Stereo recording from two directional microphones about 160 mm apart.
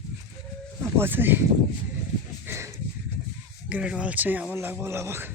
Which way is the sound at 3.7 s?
5° right (ahead or behind).